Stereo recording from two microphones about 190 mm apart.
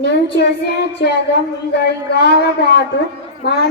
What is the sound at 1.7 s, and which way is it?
A woman's voice, 60° left (ahead or behind).